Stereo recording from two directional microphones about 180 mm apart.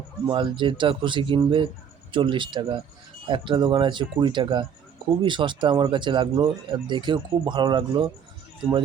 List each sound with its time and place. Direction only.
0.3 s speech: 25° right (ahead or behind)